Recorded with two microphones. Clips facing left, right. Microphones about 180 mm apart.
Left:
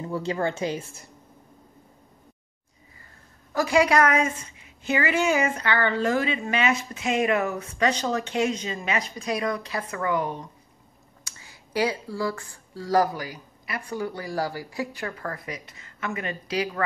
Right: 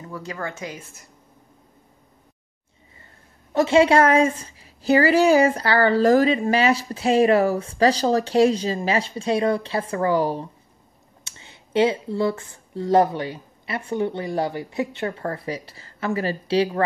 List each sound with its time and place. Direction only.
0.0 s a woman's voice: 30° left (ahead or behind)
3.5 s a woman's voice: 25° right (ahead or behind)